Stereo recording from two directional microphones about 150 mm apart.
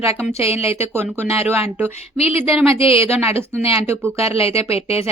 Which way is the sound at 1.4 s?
15° right (ahead or behind).